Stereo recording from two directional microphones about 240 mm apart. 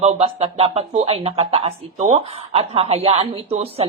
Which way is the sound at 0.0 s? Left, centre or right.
Right.